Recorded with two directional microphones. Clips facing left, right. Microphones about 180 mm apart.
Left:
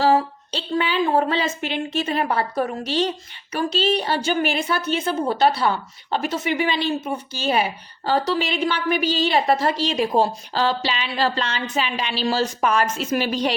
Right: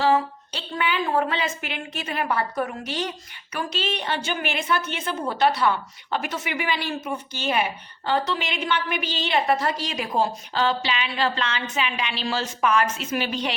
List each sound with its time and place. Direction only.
0.0 s a woman's voice: 35° left (ahead or behind)